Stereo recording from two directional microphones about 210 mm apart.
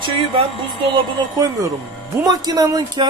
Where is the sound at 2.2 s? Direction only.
20° right (ahead or behind).